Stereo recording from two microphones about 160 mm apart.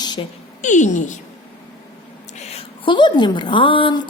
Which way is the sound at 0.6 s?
50° left (ahead or behind).